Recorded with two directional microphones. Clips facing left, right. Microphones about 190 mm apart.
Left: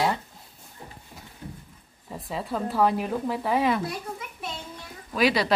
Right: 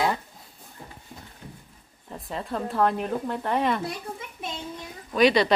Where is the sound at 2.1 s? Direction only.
5° left (ahead or behind).